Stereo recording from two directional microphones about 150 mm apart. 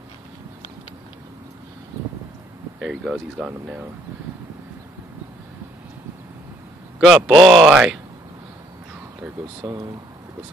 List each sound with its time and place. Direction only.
2.8 s speech: 5° right (ahead or behind)
7.1 s speech: centre (ahead or behind)
9.6 s speech: 25° right (ahead or behind)